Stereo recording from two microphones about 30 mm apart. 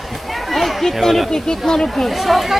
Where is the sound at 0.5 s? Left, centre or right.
Centre.